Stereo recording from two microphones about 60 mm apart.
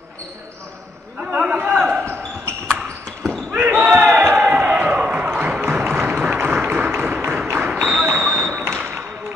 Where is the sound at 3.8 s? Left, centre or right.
Centre.